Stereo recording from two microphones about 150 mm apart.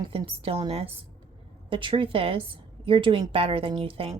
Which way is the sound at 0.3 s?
40° right (ahead or behind).